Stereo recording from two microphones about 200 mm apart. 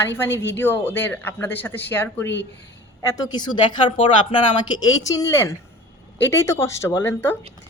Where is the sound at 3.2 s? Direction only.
20° left (ahead or behind).